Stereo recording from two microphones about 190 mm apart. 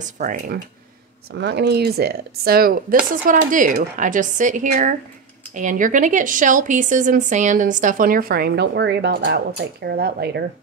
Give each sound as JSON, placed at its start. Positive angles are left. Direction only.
{"t": 0.0, "sound": "speech", "side_deg": -45}
{"t": 1.3, "sound": "speech", "side_deg": -65}